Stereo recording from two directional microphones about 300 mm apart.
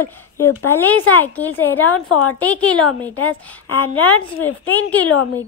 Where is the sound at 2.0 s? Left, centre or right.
Left.